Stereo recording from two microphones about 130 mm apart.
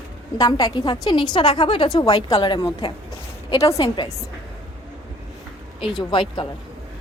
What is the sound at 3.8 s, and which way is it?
Speech, 40° left (ahead or behind).